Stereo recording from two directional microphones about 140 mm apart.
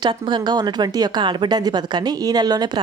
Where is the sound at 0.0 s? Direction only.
35° right (ahead or behind).